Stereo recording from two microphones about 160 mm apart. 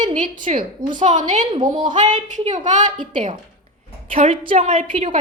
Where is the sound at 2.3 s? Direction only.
50° right (ahead or behind).